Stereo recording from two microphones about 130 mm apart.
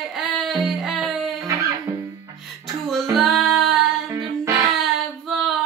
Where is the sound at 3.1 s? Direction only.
Centre (ahead or behind).